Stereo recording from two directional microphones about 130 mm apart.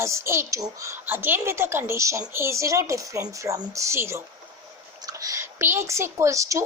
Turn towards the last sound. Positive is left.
turn(degrees=-25)  # may be behind; listen again after turning